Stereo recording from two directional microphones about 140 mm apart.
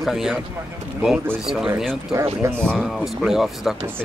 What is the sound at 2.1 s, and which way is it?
Speech, 20° right (ahead or behind).